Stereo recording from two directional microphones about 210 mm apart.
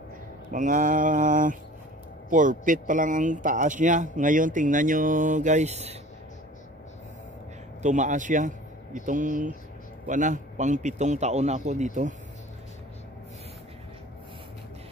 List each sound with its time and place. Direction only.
0.5 s speech: 40° right (ahead or behind)
7.8 s speech: 35° right (ahead or behind)